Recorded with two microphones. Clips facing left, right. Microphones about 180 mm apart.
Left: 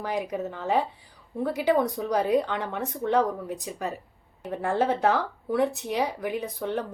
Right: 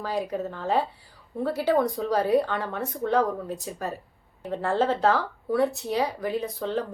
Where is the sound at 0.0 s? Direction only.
20° left (ahead or behind).